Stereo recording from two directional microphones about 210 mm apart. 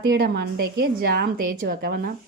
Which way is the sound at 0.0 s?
50° right (ahead or behind).